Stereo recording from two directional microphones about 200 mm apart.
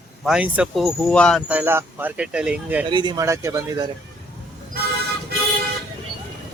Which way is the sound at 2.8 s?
20° right (ahead or behind).